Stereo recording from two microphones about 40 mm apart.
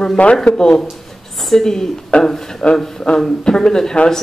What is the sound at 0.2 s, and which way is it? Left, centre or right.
Speech, left.